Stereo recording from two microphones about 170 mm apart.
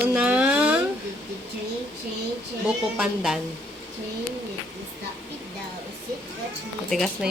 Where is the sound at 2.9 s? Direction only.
5° right (ahead or behind).